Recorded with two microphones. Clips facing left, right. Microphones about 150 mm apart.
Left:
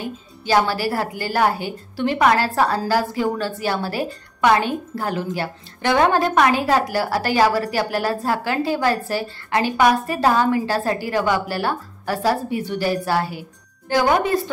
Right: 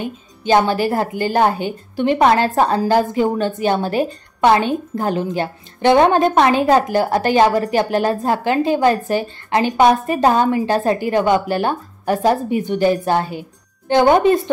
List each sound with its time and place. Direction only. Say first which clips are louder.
0.0 s a woman's voice: right 5 dB; 20° right (ahead or behind)